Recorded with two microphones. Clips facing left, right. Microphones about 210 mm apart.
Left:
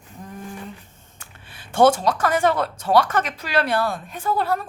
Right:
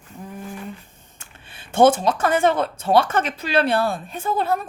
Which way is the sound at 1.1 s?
25° right (ahead or behind).